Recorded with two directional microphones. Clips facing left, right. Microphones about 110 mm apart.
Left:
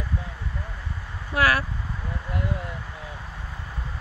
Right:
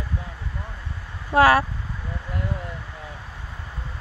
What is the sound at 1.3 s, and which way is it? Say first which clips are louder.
Speech: right 7 dB; 30° right (ahead or behind).